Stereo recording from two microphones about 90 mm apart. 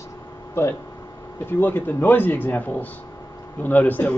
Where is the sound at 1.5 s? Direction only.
20° left (ahead or behind).